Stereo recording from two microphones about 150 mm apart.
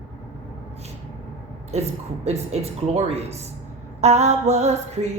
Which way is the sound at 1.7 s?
45° right (ahead or behind).